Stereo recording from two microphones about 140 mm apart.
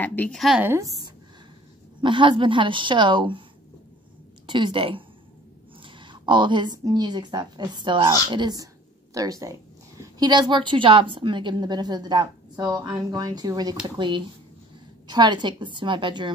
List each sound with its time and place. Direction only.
0.0 s a woman's voice: 10° left (ahead or behind)
0.4 s a woman's voice: 5° right (ahead or behind)
0.7 s a woman's voice: 20° right (ahead or behind)
2.0 s a woman's voice: 35° right (ahead or behind)
4.5 s a woman's voice: 35° right (ahead or behind)